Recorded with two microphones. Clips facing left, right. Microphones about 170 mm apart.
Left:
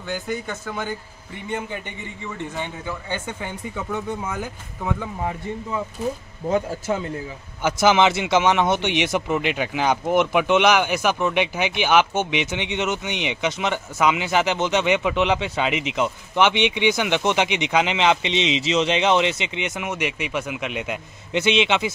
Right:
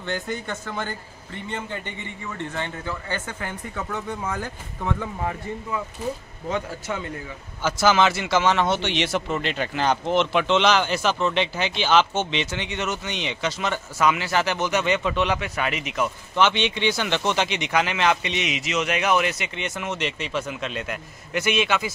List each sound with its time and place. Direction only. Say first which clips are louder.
0.0 s a man's voice: left 1 dB; 5° left (ahead or behind)
6.9 s speech: left 6 dB; 35° left (ahead or behind)
7.6 s a man's voice: left 2 dB; 20° left (ahead or behind)